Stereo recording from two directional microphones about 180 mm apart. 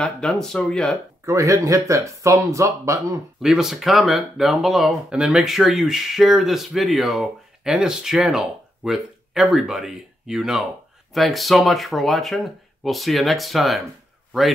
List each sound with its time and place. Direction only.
0.0 s speech: 5° left (ahead or behind)
1.2 s speech: 15° right (ahead or behind)
3.4 s speech: centre (ahead or behind)